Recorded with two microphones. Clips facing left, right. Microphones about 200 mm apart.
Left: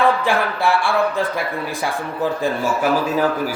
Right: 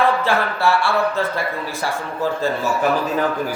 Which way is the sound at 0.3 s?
15° left (ahead or behind).